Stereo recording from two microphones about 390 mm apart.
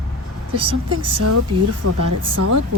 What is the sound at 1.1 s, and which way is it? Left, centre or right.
Speech, right.